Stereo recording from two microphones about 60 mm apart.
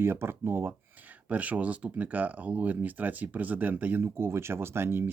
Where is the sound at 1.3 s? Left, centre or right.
Right.